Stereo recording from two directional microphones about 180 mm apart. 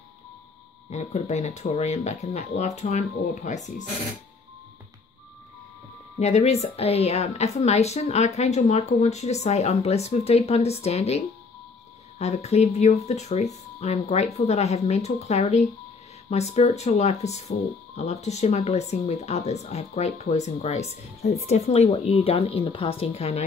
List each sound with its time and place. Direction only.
0.8 s a woman's voice: 40° left (ahead or behind)
6.1 s a woman's voice: 40° left (ahead or behind)